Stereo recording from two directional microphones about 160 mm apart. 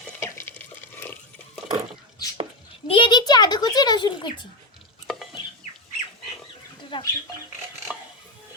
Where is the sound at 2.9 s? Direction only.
30° left (ahead or behind).